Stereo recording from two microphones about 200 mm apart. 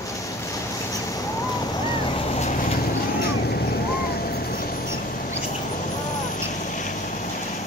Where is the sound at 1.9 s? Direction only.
25° left (ahead or behind).